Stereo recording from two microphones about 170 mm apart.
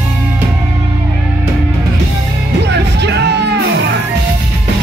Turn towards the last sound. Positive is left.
turn(degrees=-80)